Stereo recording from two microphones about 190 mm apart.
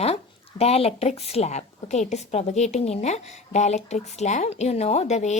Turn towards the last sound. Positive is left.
turn(degrees=35)  # may be behind; listen again after turning